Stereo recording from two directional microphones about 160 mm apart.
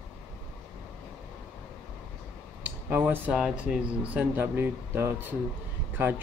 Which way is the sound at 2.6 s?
10° right (ahead or behind).